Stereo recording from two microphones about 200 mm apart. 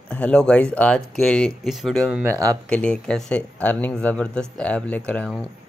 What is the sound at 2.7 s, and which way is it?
Speech, 5° left (ahead or behind).